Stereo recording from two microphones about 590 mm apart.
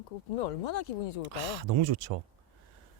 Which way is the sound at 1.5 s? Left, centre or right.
Right.